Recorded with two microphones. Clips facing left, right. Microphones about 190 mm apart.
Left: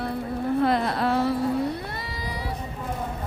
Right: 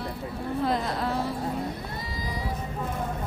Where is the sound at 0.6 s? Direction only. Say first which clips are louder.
Left 3 dB; 65° left (ahead or behind).